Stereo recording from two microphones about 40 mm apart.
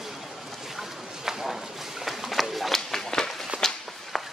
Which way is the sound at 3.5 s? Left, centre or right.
Right.